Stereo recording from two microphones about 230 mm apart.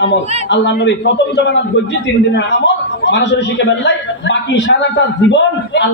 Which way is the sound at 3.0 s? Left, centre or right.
Left.